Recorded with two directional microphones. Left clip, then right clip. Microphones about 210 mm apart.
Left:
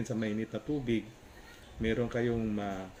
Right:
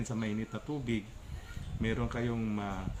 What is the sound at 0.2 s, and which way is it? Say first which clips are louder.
Speech: left 3 dB; 45° right (ahead or behind).